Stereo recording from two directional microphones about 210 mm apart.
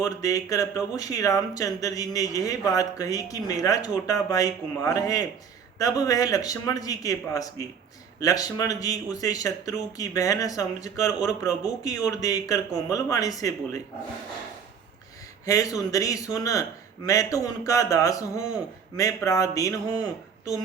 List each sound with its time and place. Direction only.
0.0 s speech: 15° left (ahead or behind)
15.4 s speech: 15° left (ahead or behind)